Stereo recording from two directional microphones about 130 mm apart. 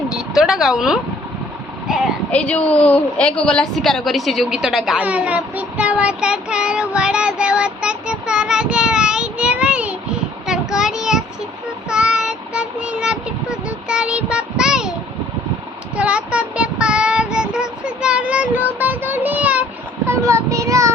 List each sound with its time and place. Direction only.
0.1 s speech: 5° right (ahead or behind)
1.9 s a sound: 5° right (ahead or behind)
2.3 s a woman's voice: 10° left (ahead or behind)
11.9 s child singing: 5° right (ahead or behind)
16.0 s child singing: 10° right (ahead or behind)
18.8 s a child's voice: 15° right (ahead or behind)
20.1 s child singing: 25° right (ahead or behind)